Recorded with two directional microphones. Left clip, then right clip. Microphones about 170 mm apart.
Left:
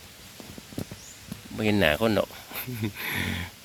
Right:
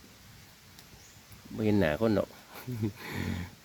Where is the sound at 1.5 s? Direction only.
5° right (ahead or behind).